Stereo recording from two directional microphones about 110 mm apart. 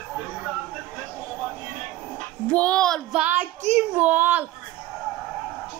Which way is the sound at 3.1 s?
15° right (ahead or behind).